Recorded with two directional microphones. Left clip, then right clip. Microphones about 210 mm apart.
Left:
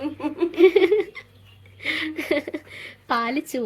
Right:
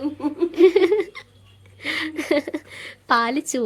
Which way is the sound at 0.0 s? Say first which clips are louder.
Right 2 dB; 15° right (ahead or behind).